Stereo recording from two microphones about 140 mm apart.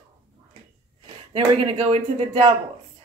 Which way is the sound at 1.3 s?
40° right (ahead or behind).